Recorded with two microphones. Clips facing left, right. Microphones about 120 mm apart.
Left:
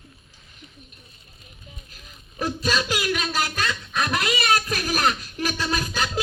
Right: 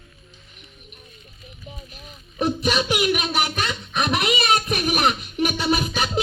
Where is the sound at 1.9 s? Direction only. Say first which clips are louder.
Right 4 dB; 20° right (ahead or behind).